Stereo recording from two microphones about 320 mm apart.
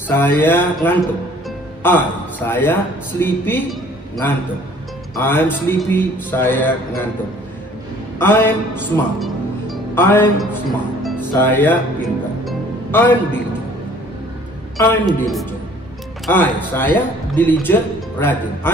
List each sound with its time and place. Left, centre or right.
0.1 s a man's voice: centre
5.2 s a man's voice: centre
8.2 s a man's voice: centre
9.2 s music: centre
11.0 s speech: centre
12.4 s music: centre
14.8 s speech: centre